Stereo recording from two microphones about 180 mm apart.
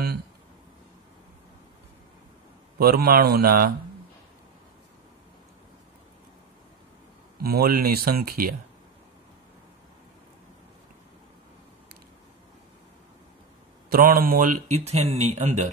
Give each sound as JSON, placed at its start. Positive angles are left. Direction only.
{"t": 2.8, "sound": "speech", "side_deg": -60}
{"t": 7.4, "sound": "speech", "side_deg": -55}
{"t": 13.8, "sound": "speech", "side_deg": -55}